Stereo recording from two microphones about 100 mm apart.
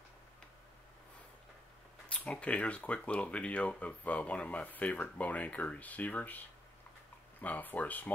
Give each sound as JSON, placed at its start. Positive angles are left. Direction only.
{"t": 2.1, "sound": "speech", "side_deg": 10}